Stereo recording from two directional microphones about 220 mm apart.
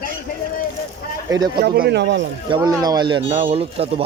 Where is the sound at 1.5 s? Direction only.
45° right (ahead or behind).